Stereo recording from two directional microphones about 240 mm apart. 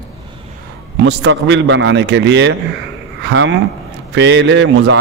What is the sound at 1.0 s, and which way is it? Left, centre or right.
A man's voice, right.